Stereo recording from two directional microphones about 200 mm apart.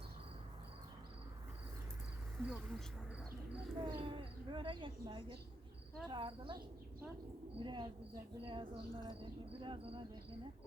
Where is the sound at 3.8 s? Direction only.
25° right (ahead or behind).